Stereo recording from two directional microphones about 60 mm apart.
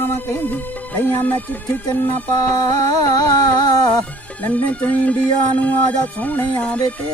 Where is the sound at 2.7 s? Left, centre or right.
Left.